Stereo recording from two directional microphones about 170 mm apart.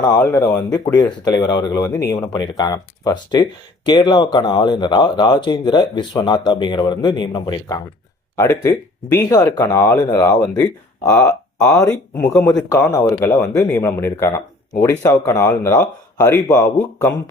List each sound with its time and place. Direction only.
0.0 s speech: 15° left (ahead or behind)